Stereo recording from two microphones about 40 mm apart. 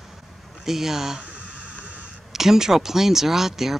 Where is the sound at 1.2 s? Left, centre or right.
Right.